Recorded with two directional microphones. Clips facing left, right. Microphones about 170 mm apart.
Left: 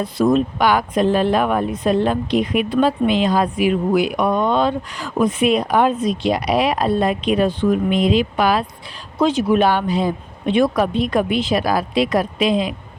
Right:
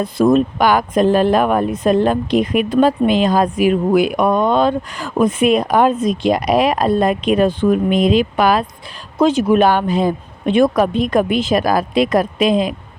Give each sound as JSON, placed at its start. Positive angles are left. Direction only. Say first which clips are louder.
{"t": 0.0, "sound": "speech", "louder": "right 3 dB", "side_deg": -50}